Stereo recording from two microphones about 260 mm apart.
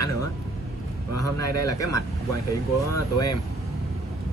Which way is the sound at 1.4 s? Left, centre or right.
Left.